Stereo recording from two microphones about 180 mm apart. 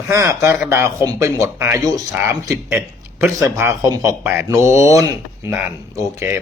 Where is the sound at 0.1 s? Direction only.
15° right (ahead or behind).